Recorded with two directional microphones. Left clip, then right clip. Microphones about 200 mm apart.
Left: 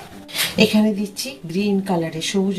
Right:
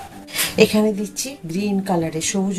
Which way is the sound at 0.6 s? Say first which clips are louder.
Right 3 dB; 20° right (ahead or behind).